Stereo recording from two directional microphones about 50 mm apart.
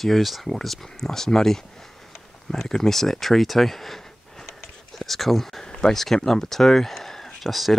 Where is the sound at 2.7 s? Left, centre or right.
Centre.